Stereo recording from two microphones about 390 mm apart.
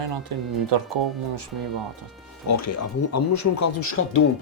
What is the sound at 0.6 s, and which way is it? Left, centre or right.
Speech, right.